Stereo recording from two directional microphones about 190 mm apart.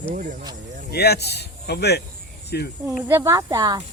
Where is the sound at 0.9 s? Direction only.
60° left (ahead or behind).